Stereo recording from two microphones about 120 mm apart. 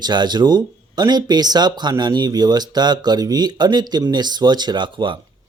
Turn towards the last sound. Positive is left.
turn(degrees=-40)  # may be behind; listen again after turning